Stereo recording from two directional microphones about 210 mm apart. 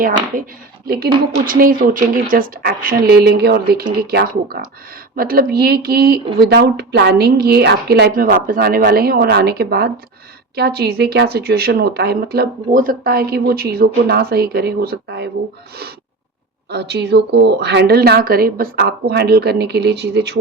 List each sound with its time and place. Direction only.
0.9 s speech: 45° right (ahead or behind)
16.6 s speech: 55° right (ahead or behind)